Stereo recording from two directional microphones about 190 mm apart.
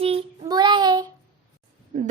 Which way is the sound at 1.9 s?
40° right (ahead or behind).